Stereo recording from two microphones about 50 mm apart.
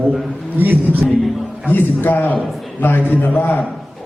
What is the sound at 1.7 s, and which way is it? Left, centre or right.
A man's voice, left.